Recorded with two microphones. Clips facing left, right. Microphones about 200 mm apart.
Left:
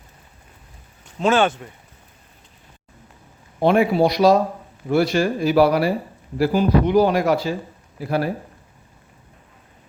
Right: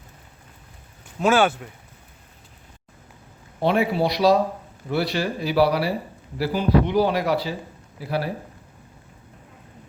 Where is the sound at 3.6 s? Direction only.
50° left (ahead or behind).